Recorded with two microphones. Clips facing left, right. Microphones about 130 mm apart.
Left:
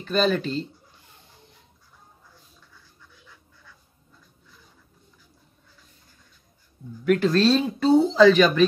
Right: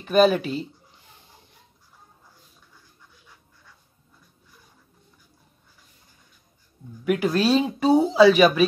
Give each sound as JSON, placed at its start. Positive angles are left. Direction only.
{"t": 0.0, "sound": "speech", "side_deg": -10}
{"t": 7.1, "sound": "speech", "side_deg": -10}